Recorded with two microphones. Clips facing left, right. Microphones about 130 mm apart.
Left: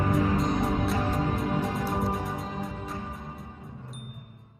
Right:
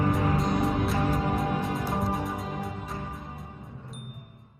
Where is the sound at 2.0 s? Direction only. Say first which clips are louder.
Even; centre (ahead or behind).